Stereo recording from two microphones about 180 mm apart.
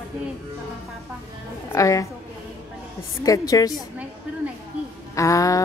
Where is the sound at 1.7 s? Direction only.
20° left (ahead or behind).